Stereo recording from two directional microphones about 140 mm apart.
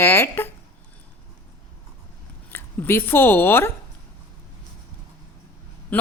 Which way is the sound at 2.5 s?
15° left (ahead or behind).